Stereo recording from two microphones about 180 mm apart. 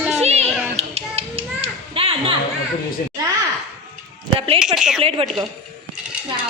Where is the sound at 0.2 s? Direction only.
35° right (ahead or behind).